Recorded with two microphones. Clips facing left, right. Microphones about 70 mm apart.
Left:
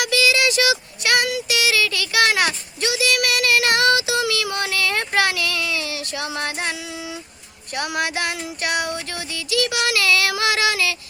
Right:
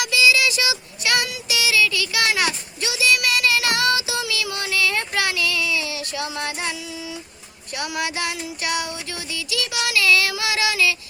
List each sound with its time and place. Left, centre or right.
0.0 s child singing: left
7.8 s music: left